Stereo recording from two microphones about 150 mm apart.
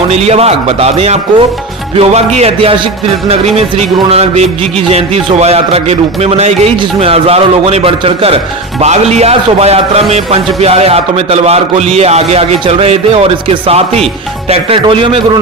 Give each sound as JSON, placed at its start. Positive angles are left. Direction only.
{"t": 0.1, "sound": "a man's voice", "side_deg": -45}